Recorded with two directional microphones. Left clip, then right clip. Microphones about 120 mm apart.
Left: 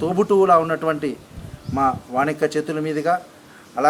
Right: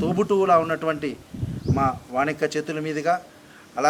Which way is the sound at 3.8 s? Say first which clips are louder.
Left 3 dB; 15° right (ahead or behind).